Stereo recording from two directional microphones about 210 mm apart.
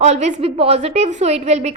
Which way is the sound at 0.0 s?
30° right (ahead or behind).